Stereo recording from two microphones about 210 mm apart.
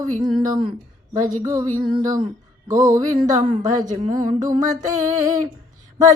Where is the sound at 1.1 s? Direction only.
40° right (ahead or behind).